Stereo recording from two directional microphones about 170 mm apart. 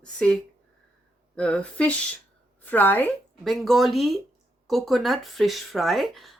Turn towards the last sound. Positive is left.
turn(degrees=0)  # may be behind; listen again after turning